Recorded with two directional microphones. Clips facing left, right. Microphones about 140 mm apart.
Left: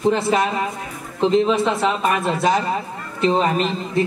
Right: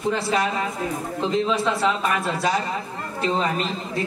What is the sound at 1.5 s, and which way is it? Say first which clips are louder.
Speech: left 4 dB; 20° left (ahead or behind).